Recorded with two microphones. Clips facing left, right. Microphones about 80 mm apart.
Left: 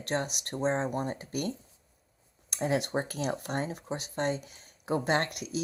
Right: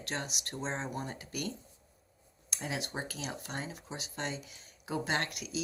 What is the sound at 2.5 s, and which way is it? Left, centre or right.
Speech, left.